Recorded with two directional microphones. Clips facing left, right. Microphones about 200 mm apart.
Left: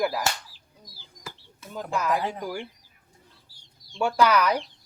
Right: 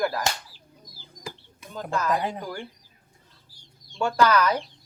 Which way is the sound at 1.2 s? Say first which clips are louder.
Right 4 dB; 15° right (ahead or behind).